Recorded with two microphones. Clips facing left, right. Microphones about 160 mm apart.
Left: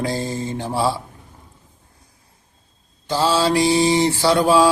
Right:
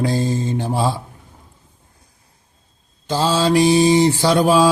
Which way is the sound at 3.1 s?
20° right (ahead or behind).